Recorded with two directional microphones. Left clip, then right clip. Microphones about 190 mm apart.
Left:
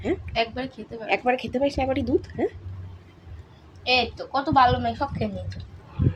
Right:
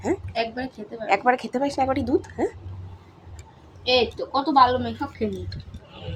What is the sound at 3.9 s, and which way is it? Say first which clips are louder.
Speech: right 2 dB; 40° left (ahead or behind).